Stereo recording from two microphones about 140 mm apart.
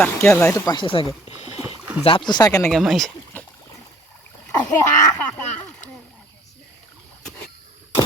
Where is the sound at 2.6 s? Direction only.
Centre (ahead or behind).